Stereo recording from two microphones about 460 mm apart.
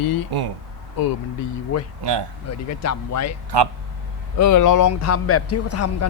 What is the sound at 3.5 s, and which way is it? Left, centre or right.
Speech, right.